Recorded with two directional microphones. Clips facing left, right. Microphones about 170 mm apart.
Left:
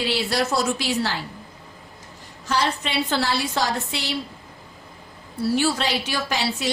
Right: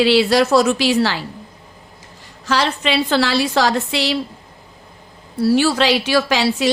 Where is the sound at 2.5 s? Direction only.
90° right.